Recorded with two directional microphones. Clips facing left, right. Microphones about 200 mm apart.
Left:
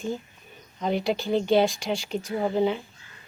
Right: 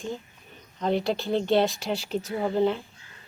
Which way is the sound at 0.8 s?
5° left (ahead or behind).